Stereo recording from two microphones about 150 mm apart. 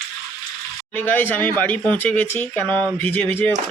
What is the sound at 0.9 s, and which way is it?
Speech, 15° left (ahead or behind).